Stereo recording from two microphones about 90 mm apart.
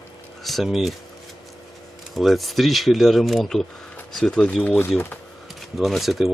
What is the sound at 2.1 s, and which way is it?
Speech, centre (ahead or behind).